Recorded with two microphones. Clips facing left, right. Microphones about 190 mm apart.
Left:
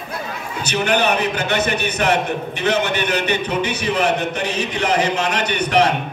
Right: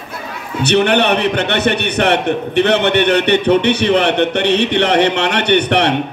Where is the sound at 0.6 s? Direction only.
65° right (ahead or behind).